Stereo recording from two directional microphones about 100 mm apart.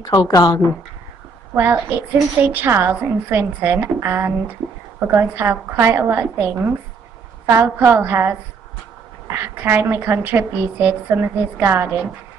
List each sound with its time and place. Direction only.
0.0 s speech: 45° left (ahead or behind)
1.5 s a woman's voice: 20° right (ahead or behind)